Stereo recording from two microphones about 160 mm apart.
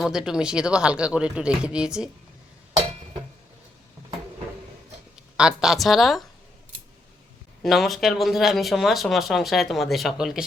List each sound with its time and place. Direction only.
0.0 s speech: 5° right (ahead or behind)
5.1 s speech: 5° right (ahead or behind)
7.6 s speech: centre (ahead or behind)